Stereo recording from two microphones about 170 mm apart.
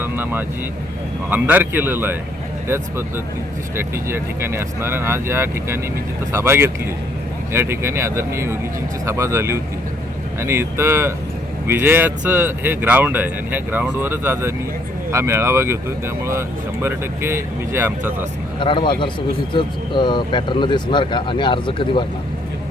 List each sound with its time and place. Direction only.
0.0 s vehicle: 10° right (ahead or behind)
1.3 s speech: 10° right (ahead or behind)
3.8 s speech: 15° right (ahead or behind)
18.6 s speech: 30° left (ahead or behind)